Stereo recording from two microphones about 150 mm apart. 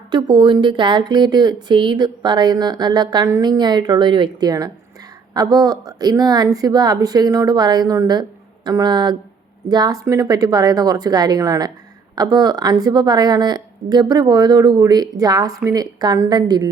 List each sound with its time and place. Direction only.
0.1 s speech: 30° right (ahead or behind)